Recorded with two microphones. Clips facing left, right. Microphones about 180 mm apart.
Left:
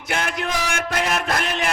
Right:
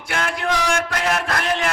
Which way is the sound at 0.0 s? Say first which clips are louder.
Even; 20° left (ahead or behind).